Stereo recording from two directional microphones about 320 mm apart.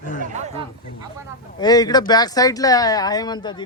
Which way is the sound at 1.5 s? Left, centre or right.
Centre.